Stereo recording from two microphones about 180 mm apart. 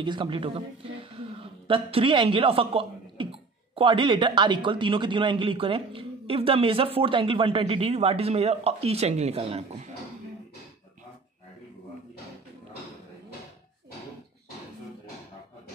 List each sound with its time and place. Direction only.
0.0 s a man's voice: 25° right (ahead or behind)